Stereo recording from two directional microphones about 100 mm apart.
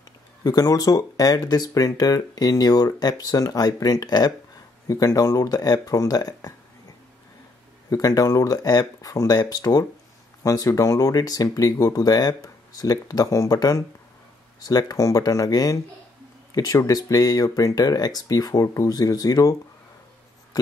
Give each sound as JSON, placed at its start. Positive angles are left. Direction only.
{"t": 0.4, "sound": "speech", "side_deg": 40}
{"t": 7.9, "sound": "speech", "side_deg": 35}